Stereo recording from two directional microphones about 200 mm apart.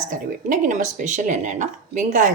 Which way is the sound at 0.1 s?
40° right (ahead or behind).